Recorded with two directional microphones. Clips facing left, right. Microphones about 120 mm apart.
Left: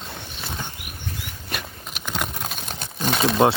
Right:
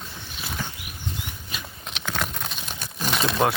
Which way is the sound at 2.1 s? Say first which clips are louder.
Even; 15° left (ahead or behind).